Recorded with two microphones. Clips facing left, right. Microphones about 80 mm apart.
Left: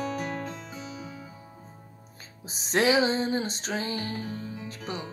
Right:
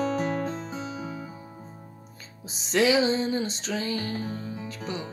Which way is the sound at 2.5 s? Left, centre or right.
Left.